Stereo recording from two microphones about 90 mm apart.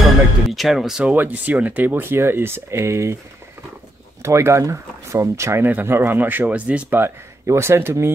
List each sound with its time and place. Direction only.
0.0 s speech: centre (ahead or behind)
1.0 s speech: 20° right (ahead or behind)
4.2 s speech: 30° right (ahead or behind)